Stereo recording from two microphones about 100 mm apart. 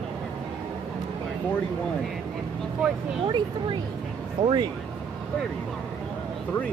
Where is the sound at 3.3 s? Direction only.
50° right (ahead or behind).